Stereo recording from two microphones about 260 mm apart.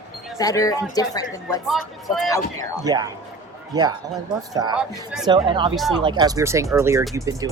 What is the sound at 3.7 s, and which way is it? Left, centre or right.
Speech, centre.